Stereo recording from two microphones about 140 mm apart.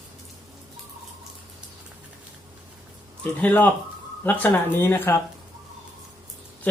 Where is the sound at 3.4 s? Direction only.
10° left (ahead or behind).